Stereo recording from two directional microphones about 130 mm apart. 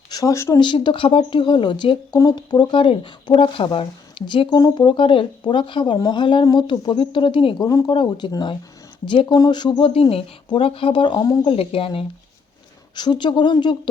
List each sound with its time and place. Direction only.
0.1 s speech: 25° left (ahead or behind)
0.6 s a woman's voice: 35° left (ahead or behind)
4.5 s a woman's voice: 30° left (ahead or behind)